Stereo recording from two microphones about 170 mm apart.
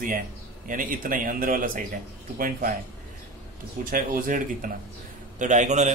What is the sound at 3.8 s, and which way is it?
A man's voice, 55° right (ahead or behind).